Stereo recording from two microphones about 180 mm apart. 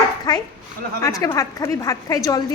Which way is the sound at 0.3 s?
20° left (ahead or behind).